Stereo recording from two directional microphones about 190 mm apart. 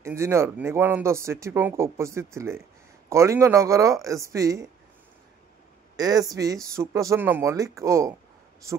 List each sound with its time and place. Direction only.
0.0 s speech: 15° right (ahead or behind)
5.9 s speech: 20° right (ahead or behind)